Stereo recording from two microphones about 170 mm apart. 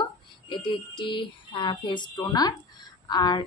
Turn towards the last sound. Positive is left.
turn(degrees=25)  # may be behind; listen again after turning